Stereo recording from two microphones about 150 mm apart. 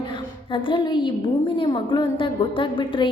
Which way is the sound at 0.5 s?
30° left (ahead or behind).